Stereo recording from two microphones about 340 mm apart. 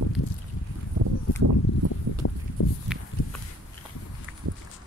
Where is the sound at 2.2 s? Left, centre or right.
Left.